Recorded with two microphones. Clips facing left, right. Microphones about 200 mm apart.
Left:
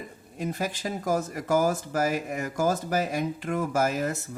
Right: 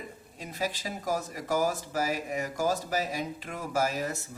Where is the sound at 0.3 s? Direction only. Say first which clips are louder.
Left 4 dB; 50° left (ahead or behind).